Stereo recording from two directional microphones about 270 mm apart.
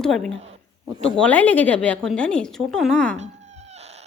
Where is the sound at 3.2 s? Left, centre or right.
Right.